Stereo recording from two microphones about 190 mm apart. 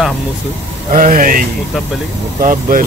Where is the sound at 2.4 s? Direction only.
45° right (ahead or behind).